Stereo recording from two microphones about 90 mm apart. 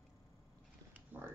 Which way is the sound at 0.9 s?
20° right (ahead or behind).